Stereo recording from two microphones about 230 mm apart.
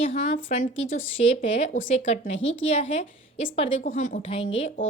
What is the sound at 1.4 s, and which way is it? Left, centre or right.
A woman's voice, left.